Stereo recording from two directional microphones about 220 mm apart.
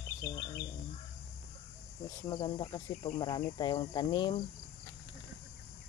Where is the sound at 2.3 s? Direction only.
20° left (ahead or behind).